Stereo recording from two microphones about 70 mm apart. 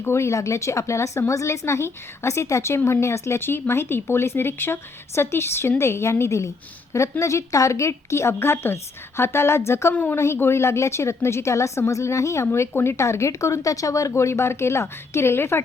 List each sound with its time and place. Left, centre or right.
0.0 s a woman's voice: left
9.9 s a woman's voice: left
10.2 s a woman's voice: left